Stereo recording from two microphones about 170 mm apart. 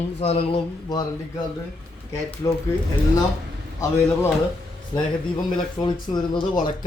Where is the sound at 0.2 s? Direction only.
35° left (ahead or behind).